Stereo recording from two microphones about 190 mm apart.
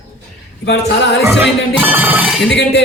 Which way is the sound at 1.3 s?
10° right (ahead or behind).